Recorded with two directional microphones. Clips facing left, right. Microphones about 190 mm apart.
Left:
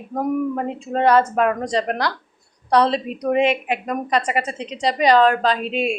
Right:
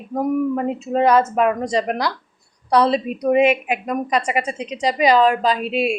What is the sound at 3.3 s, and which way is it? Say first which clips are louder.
A woman's voice: right 2 dB; 10° right (ahead or behind).